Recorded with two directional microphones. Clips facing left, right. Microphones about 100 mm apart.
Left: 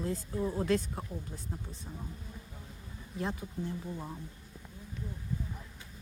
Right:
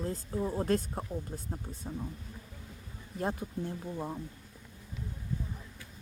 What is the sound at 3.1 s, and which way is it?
Speech, 50° right (ahead or behind).